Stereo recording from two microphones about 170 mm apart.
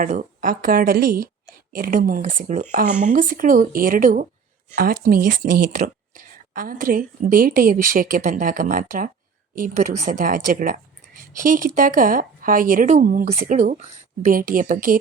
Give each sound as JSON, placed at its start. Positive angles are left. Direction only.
{"t": 0.0, "sound": "a woman's voice", "side_deg": -55}